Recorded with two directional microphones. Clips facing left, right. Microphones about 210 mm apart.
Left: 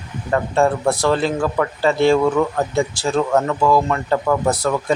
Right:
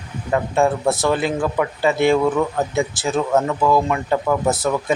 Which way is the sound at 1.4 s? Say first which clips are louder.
Left 1 dB; 15° right (ahead or behind).